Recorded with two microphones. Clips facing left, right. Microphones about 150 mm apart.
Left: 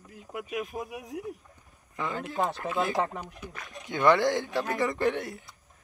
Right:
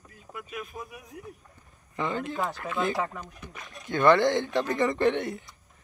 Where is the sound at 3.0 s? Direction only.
20° left (ahead or behind); by 5.5 s centre (ahead or behind).